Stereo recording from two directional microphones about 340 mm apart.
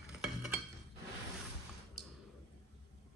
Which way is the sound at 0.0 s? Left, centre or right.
Centre.